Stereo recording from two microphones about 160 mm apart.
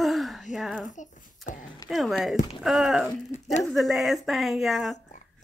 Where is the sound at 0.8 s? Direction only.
50° left (ahead or behind).